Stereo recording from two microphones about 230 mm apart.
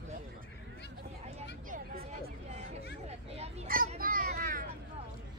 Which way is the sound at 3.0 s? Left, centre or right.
Right.